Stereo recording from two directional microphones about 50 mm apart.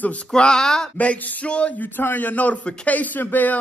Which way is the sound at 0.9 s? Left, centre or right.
Left.